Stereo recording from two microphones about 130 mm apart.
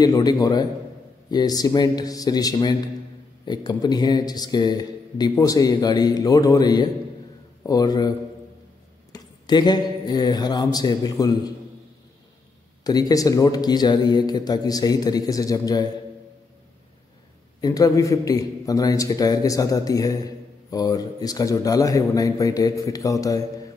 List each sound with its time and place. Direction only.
0.0 s a man's voice: 30° left (ahead or behind)
9.1 s a man's voice: 30° left (ahead or behind)
12.8 s a man's voice: 30° left (ahead or behind)
17.6 s a man's voice: 30° left (ahead or behind)